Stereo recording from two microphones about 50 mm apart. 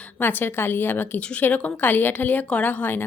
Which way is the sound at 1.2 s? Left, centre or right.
Left.